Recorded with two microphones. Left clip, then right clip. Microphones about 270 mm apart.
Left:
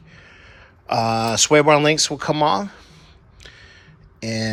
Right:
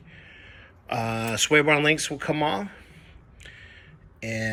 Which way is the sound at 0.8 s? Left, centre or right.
Centre.